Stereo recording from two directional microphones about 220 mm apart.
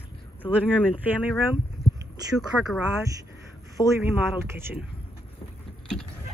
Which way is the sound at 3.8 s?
20° left (ahead or behind).